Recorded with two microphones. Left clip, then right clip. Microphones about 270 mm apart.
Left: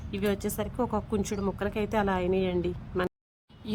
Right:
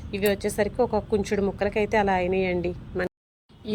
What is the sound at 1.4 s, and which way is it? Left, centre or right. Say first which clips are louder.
Speech: right 6 dB; left.